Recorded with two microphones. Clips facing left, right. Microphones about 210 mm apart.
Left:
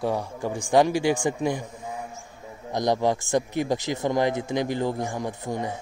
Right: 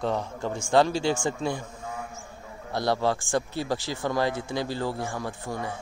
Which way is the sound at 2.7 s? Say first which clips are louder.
Left 2 dB; 15° left (ahead or behind).